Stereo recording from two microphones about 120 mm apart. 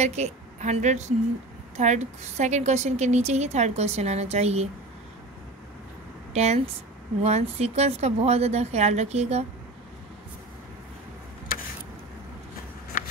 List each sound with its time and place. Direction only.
0.0 s a woman's voice: 70° right (ahead or behind)
6.3 s a woman's voice: 65° right (ahead or behind)